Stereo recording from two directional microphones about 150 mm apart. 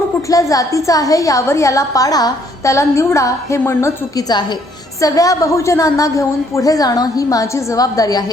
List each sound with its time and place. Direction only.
0.3 s a woman's voice: 20° left (ahead or behind)